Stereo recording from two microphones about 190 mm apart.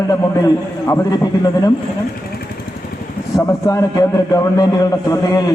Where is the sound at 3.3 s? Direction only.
15° left (ahead or behind).